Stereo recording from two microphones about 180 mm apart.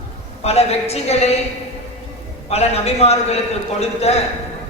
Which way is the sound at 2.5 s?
35° left (ahead or behind).